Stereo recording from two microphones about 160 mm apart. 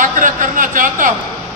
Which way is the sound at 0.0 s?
55° right (ahead or behind).